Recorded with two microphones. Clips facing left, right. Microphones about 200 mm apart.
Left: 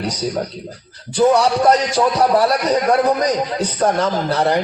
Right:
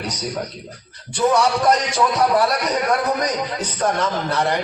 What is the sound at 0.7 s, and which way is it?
A man's voice, 30° left (ahead or behind).